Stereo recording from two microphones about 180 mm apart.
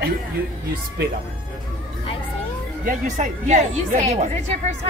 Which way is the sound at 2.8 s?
45° right (ahead or behind).